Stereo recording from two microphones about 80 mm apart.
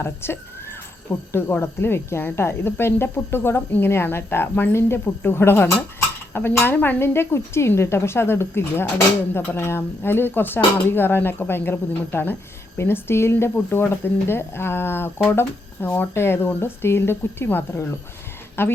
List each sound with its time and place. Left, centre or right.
0.0 s a woman's voice: left